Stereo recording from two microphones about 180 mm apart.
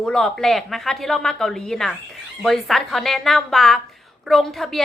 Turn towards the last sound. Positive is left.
turn(degrees=0)  # may be behind; listen again after turning